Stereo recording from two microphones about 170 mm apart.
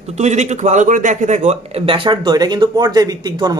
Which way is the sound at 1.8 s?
30° right (ahead or behind).